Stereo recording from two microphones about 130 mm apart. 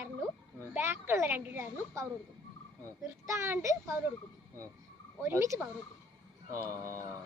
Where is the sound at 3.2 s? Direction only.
20° right (ahead or behind).